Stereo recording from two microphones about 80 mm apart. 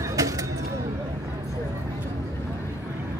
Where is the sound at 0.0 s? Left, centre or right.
Right.